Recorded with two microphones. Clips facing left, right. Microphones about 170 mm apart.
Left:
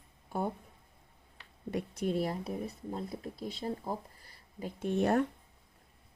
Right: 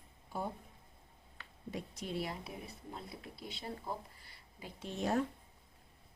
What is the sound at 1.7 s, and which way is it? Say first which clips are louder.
A woman's voice: left 8 dB; 60° left (ahead or behind).